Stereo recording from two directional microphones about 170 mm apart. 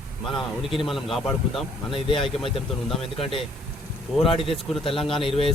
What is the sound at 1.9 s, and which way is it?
Speech, 30° left (ahead or behind).